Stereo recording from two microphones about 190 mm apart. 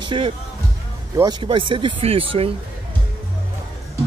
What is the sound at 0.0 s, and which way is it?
Speech, 25° right (ahead or behind).